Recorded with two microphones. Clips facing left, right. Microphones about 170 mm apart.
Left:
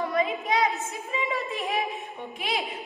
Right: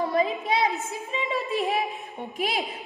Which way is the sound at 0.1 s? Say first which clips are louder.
Right 1 dB; 30° right (ahead or behind).